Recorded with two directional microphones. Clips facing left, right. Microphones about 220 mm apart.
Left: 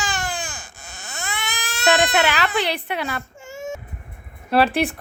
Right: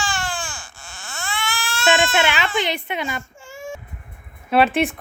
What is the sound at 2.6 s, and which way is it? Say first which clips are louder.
Speech: even; 5° left (ahead or behind).